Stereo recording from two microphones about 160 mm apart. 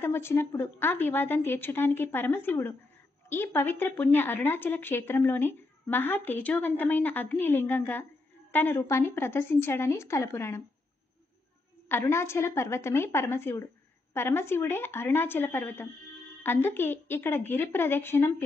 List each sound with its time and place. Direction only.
0.0 s speech: 15° left (ahead or behind)
11.9 s speech: 15° left (ahead or behind)